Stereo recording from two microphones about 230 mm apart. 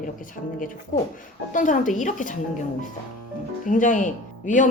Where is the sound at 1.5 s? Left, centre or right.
Left.